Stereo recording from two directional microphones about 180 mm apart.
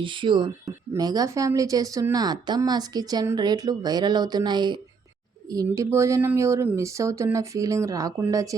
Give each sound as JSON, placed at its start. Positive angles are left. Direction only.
{"t": 0.0, "sound": "speech", "side_deg": -25}